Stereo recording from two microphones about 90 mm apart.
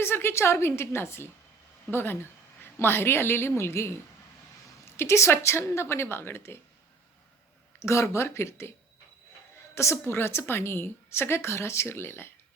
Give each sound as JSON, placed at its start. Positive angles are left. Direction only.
{"t": 0.0, "sound": "a woman's voice", "side_deg": 25}
{"t": 7.8, "sound": "speech", "side_deg": 35}
{"t": 9.7, "sound": "a woman's voice", "side_deg": 30}